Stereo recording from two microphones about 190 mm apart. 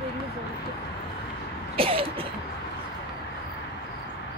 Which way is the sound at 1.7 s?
30° right (ahead or behind).